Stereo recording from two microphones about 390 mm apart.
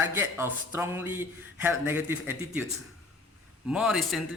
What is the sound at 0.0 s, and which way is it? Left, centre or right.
Speech, centre.